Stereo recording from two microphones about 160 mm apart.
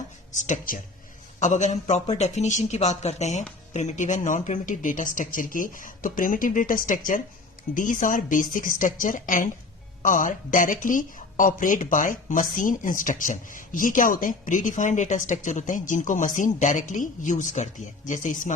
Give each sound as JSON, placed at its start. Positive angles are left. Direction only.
{"t": 0.3, "sound": "speech", "side_deg": 50}